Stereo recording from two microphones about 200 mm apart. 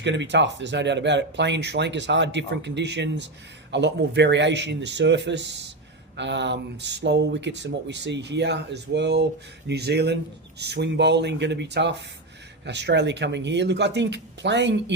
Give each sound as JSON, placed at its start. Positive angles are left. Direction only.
{"t": 0.0, "sound": "speech", "side_deg": -60}